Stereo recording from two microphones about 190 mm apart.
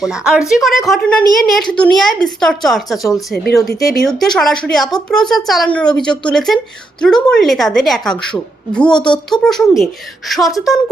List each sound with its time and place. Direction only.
0.0 s speech: 5° right (ahead or behind)
3.3 s speech: 55° left (ahead or behind)
3.8 s speech: centre (ahead or behind)